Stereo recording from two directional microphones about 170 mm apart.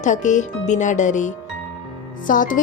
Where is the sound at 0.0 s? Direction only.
45° left (ahead or behind).